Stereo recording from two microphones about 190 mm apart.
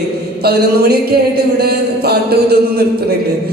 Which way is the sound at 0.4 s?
55° right (ahead or behind).